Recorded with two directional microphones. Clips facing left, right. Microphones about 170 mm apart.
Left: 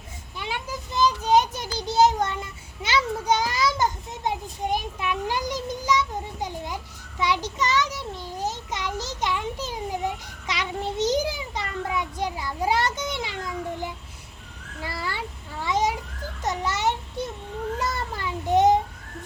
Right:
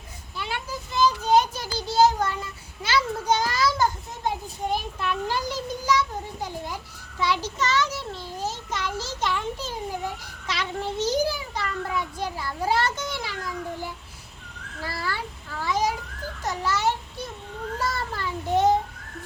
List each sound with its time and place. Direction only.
0.3 s child singing: 15° left (ahead or behind)
7.2 s a sound: 15° left (ahead or behind)
14.8 s babbling: 20° left (ahead or behind)
15.6 s children playing: 20° left (ahead or behind)
16.4 s a sound: 20° left (ahead or behind)
17.9 s child singing: 20° left (ahead or behind)